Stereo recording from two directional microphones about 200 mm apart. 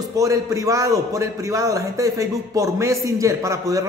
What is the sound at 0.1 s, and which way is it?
A man's voice, 15° right (ahead or behind).